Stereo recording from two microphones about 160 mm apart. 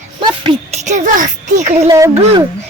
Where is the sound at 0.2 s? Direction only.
30° right (ahead or behind).